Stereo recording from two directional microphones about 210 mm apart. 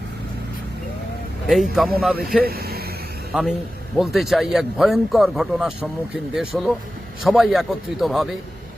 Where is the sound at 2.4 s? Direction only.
45° right (ahead or behind).